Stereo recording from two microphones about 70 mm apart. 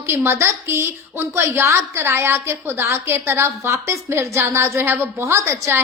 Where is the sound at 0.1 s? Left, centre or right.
Right.